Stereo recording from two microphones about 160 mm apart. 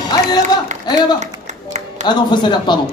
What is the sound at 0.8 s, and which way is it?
Speech, 25° left (ahead or behind).